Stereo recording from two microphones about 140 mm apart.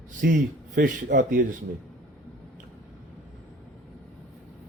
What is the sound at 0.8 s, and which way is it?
Speech, 70° right (ahead or behind).